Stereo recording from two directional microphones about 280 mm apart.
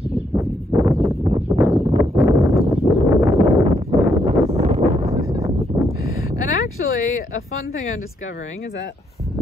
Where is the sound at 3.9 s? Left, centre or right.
Centre.